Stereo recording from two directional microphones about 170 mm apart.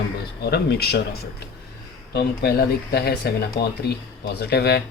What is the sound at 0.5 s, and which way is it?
Speech, 70° left (ahead or behind).